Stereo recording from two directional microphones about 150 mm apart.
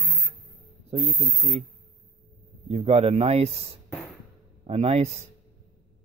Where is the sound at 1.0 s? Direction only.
Centre (ahead or behind).